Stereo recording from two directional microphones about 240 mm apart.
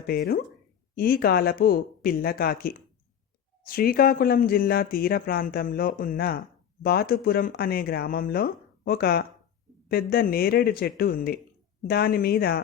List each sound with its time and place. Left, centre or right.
0.1 s speech: left